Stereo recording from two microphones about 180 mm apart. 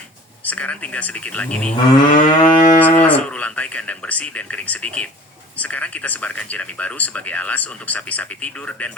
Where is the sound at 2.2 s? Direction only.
45° left (ahead or behind).